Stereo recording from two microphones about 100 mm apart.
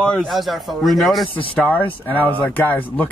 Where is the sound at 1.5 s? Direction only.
15° left (ahead or behind).